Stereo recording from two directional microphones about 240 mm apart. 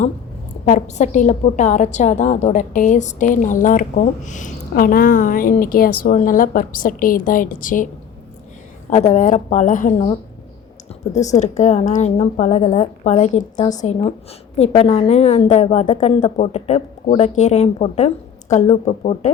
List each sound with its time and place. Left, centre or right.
0.6 s a woman's voice: left
8.9 s a woman's voice: left